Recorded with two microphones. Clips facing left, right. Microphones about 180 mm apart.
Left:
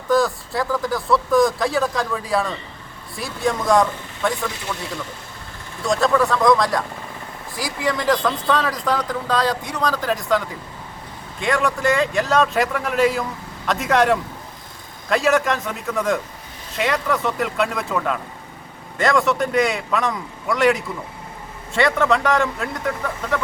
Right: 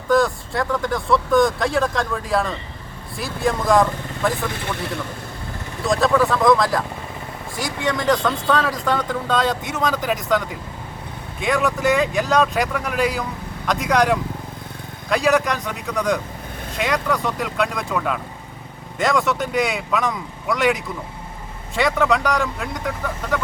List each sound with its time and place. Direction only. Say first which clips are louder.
0.1 s speech: right 1 dB; centre (ahead or behind)
4.5 s a man's voice: right 2 dB; 60° right (ahead or behind)
5.8 s speech: even; centre (ahead or behind)